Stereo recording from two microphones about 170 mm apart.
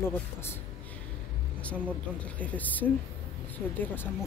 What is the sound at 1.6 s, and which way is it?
Speech, 10° left (ahead or behind).